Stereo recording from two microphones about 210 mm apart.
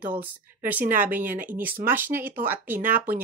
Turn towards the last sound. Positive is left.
turn(degrees=-10)  # may be behind; listen again after turning